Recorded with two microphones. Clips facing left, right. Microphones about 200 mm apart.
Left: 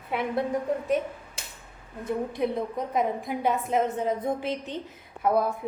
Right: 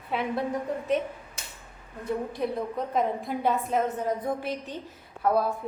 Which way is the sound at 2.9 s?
10° left (ahead or behind).